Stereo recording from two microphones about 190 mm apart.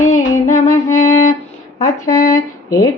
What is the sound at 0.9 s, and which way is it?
Music, 35° left (ahead or behind).